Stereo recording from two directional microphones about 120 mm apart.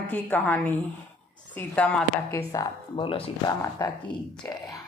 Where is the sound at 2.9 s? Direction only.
45° left (ahead or behind).